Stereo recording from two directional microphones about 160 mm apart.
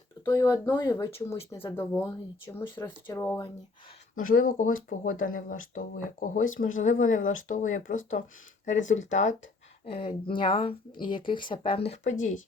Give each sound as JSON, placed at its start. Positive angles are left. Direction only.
{"t": 0.3, "sound": "speech", "side_deg": 20}
{"t": 2.7, "sound": "speech", "side_deg": 30}
{"t": 3.2, "sound": "speech", "side_deg": 15}
{"t": 4.1, "sound": "speech", "side_deg": 60}
{"t": 9.8, "sound": "speech", "side_deg": 35}